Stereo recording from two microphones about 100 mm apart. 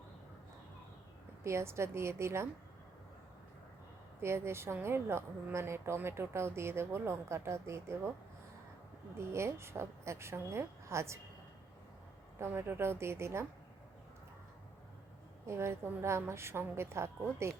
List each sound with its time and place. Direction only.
1.5 s speech: 25° right (ahead or behind)
4.2 s speech: 25° right (ahead or behind)
9.1 s speech: 25° right (ahead or behind)
12.4 s speech: 20° right (ahead or behind)
15.4 s speech: 25° right (ahead or behind)